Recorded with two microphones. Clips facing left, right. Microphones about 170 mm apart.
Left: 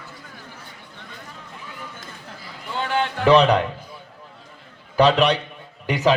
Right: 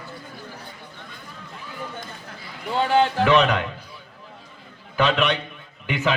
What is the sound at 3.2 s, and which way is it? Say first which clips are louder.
Speech: left 3 dB; 35° left (ahead or behind).